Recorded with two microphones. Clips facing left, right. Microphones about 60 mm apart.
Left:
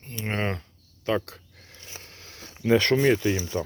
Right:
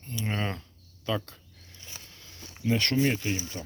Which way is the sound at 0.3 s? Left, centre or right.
Left.